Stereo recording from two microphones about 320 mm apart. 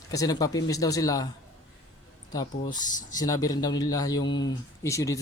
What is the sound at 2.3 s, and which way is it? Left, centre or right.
A man's voice, centre.